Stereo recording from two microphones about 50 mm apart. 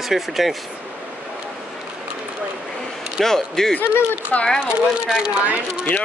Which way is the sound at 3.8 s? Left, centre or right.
Left.